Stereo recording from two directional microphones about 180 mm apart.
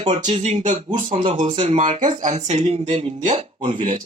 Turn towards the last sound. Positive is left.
turn(degrees=-35)  # may be behind; listen again after turning